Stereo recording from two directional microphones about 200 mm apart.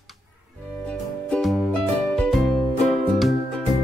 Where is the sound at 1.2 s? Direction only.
5° left (ahead or behind).